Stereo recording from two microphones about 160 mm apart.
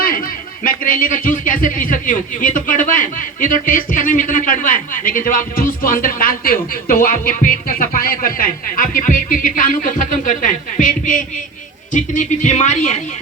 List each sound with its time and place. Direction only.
0.0 s speech: 60° left (ahead or behind); by 13.0 s 45° left (ahead or behind)